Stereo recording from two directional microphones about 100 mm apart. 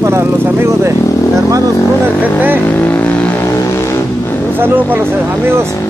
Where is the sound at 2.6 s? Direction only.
20° left (ahead or behind).